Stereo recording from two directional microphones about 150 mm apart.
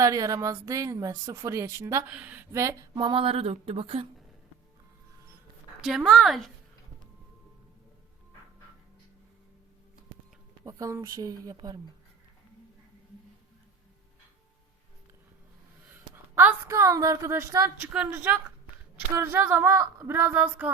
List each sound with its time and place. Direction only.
0.0 s a woman's voice: 25° right (ahead or behind)
2.5 s speech: 20° right (ahead or behind); by 4.0 s 40° right (ahead or behind)
5.8 s a woman's voice: centre (ahead or behind)
10.6 s a woman's voice: 20° right (ahead or behind)
16.3 s a woman's voice: 15° right (ahead or behind)